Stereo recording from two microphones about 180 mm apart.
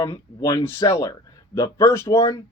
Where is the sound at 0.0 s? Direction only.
20° left (ahead or behind).